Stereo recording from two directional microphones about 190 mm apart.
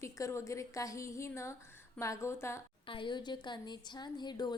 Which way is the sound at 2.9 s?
25° left (ahead or behind).